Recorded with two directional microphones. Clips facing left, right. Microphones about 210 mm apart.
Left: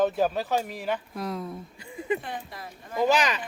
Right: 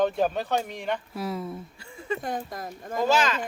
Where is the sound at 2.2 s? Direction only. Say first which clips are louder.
Right 5 dB; 45° right (ahead or behind).